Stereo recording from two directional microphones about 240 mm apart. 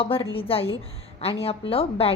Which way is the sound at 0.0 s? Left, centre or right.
Left.